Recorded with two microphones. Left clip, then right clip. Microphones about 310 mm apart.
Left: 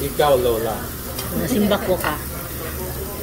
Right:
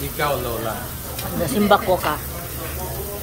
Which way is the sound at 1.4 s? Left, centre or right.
Centre.